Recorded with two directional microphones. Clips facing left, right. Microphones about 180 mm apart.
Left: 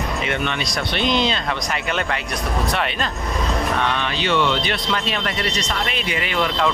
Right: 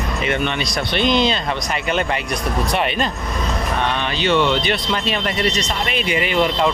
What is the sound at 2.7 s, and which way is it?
Speech, 10° right (ahead or behind).